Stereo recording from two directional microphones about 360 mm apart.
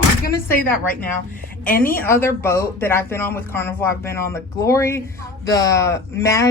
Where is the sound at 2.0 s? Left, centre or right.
Centre.